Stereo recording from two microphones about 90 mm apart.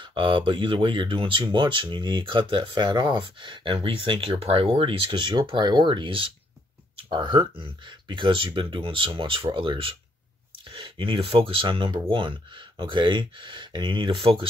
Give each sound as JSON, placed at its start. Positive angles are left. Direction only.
{"t": 0.0, "sound": "speech", "side_deg": -65}